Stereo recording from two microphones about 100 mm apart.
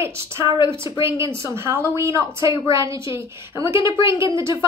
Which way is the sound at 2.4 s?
55° left (ahead or behind).